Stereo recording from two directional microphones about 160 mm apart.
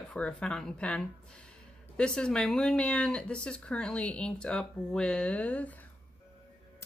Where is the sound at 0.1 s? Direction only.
5° left (ahead or behind).